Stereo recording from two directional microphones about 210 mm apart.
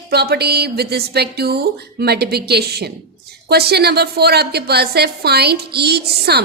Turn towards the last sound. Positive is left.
turn(degrees=-50)  # may be behind; listen again after turning